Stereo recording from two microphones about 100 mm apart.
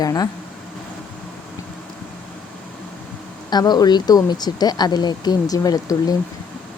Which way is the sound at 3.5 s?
40° left (ahead or behind).